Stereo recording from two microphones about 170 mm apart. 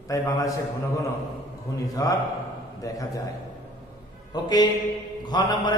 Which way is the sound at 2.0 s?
20° left (ahead or behind).